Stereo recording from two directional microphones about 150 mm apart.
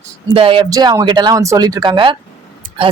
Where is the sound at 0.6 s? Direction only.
25° right (ahead or behind).